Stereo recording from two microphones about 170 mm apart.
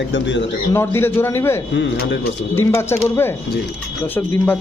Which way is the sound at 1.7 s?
90° left.